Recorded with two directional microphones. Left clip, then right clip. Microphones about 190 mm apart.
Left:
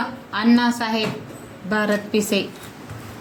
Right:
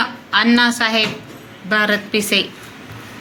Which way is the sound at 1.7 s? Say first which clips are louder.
Right 5 dB; 20° left (ahead or behind).